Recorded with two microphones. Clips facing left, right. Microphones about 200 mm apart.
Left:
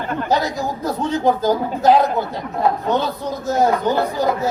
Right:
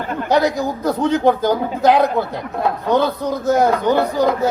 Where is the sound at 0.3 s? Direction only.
65° right (ahead or behind).